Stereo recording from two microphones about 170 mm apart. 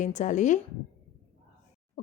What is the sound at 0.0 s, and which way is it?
Speech, 45° left (ahead or behind).